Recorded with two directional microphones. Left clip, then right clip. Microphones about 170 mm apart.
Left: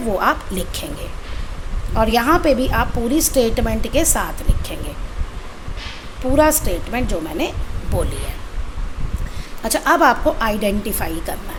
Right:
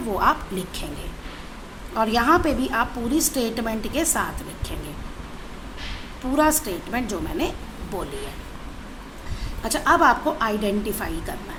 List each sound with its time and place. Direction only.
0.2 s a woman's voice: 20° left (ahead or behind)
2.0 s a woman's voice: 20° left (ahead or behind)
6.3 s a woman's voice: 15° left (ahead or behind)
9.6 s a woman's voice: 25° left (ahead or behind)